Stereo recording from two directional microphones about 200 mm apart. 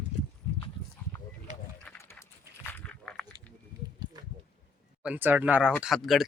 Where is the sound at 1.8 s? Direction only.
15° left (ahead or behind).